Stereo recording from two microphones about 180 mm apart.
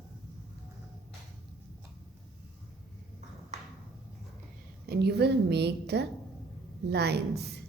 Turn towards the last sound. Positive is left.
turn(degrees=-65)  # may be behind; listen again after turning